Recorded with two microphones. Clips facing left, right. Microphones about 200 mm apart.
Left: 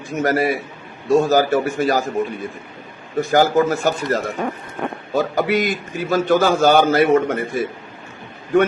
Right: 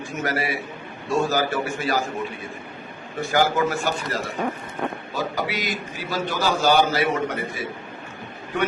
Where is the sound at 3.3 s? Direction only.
40° left (ahead or behind).